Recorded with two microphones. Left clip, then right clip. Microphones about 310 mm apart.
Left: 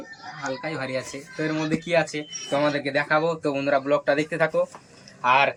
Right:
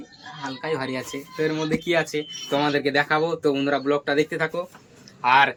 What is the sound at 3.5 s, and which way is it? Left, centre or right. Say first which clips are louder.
Speech: even; right.